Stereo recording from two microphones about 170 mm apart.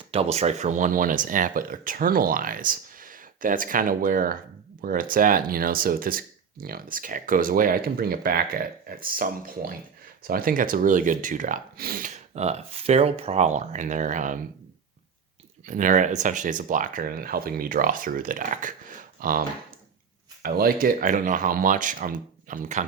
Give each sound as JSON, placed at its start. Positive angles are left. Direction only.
{"t": 0.1, "sound": "speech", "side_deg": -35}
{"t": 15.6, "sound": "speech", "side_deg": -50}